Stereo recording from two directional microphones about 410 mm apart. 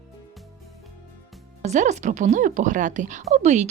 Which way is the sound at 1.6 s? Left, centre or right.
Centre.